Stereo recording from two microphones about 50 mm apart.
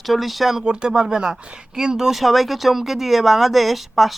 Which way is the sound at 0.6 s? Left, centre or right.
Centre.